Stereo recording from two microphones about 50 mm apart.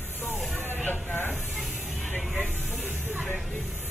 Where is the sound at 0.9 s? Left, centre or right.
Left.